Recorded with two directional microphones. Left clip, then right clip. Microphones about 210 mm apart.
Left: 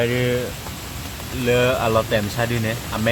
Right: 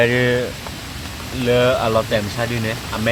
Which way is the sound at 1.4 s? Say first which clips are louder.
Right 2 dB; centre (ahead or behind).